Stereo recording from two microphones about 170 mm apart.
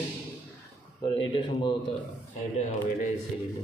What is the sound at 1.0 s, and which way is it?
Speech, 30° left (ahead or behind).